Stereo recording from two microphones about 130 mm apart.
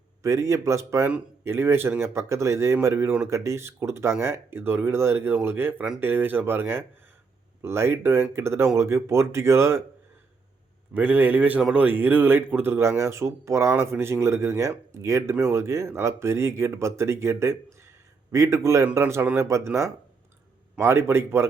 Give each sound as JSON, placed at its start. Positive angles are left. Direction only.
{"t": 0.2, "sound": "speech", "side_deg": -25}
{"t": 10.9, "sound": "speech", "side_deg": -10}